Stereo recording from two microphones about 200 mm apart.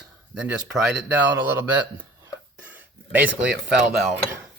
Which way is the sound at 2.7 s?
10° right (ahead or behind).